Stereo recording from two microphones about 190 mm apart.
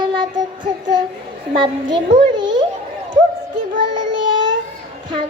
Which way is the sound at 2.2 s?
25° right (ahead or behind).